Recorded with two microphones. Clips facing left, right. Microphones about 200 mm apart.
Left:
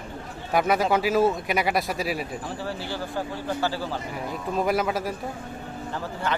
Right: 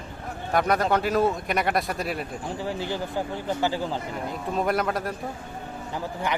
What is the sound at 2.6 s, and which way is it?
Speech, 15° right (ahead or behind).